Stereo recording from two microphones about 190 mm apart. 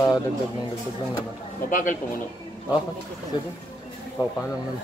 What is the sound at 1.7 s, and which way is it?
Speech, 45° left (ahead or behind).